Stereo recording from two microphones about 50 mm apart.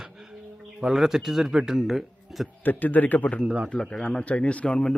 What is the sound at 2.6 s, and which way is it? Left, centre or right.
Speech, left.